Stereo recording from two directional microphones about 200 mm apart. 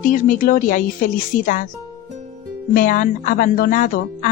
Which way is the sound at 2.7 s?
40° left (ahead or behind).